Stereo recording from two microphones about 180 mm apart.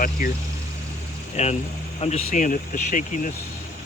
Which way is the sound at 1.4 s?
35° left (ahead or behind).